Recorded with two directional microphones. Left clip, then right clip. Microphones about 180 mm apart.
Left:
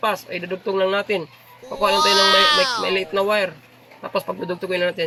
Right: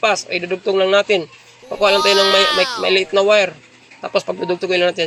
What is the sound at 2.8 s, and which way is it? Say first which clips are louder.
Speech: right 6 dB; 10° right (ahead or behind).